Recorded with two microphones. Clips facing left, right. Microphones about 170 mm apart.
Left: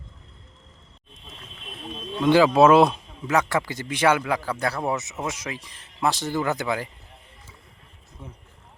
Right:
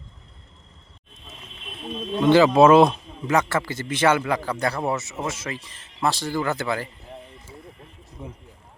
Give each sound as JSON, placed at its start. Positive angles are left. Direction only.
{"t": 2.3, "sound": "a man's voice", "side_deg": 10}
{"t": 8.2, "sound": "speech", "side_deg": -15}